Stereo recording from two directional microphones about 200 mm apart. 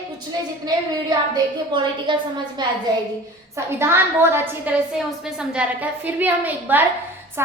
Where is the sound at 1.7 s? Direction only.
25° right (ahead or behind).